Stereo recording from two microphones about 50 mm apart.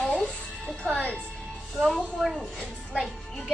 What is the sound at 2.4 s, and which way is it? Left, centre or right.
Speech, centre.